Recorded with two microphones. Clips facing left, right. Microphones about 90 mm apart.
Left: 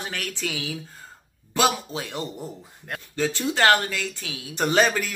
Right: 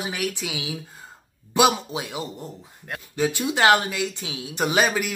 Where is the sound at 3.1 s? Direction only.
15° right (ahead or behind).